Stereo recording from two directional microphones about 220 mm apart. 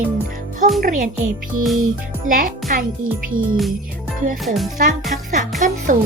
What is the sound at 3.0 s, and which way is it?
Speech, 65° right (ahead or behind).